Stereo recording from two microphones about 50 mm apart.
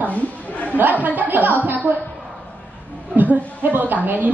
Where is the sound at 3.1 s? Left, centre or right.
Right.